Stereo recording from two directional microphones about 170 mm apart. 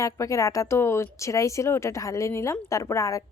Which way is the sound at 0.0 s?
20° left (ahead or behind).